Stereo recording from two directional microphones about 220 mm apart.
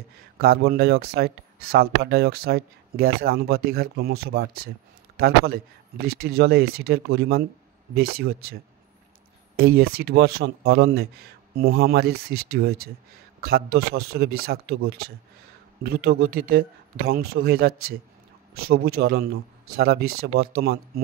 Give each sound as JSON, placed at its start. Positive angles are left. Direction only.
{"t": 0.4, "sound": "a man's voice", "side_deg": -45}
{"t": 9.6, "sound": "speech", "side_deg": -45}